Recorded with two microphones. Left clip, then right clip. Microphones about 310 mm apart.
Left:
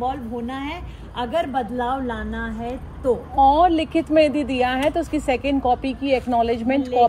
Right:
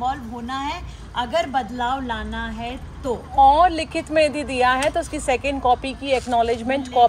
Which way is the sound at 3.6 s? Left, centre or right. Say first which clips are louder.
Left 1 dB; right.